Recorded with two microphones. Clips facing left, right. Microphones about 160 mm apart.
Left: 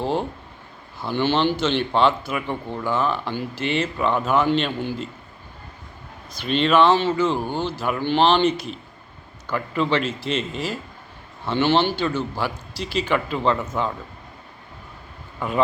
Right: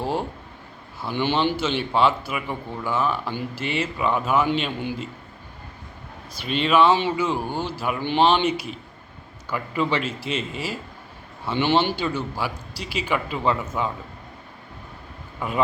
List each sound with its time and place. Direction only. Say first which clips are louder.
0.0 s speech: left 2 dB; 10° right (ahead or behind)
6.4 s speech: left 1 dB; 5° right (ahead or behind)
15.4 s speech: left 2 dB; 5° right (ahead or behind)